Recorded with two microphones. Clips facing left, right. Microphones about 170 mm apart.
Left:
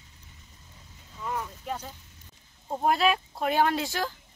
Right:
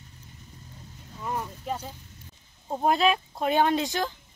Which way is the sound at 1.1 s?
15° right (ahead or behind).